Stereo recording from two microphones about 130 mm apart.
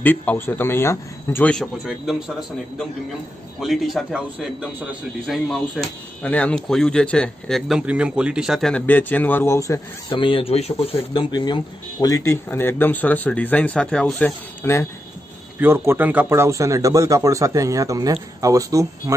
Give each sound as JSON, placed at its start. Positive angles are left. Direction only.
{"t": 0.0, "sound": "speech", "side_deg": 15}
{"t": 1.5, "sound": "a man's voice", "side_deg": 0}
{"t": 3.5, "sound": "a man's voice", "side_deg": 0}
{"t": 10.1, "sound": "speech", "side_deg": 40}
{"t": 11.1, "sound": "speech", "side_deg": 35}
{"t": 15.6, "sound": "speech", "side_deg": -20}